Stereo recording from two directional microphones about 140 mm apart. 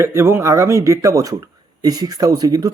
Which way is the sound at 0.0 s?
20° right (ahead or behind).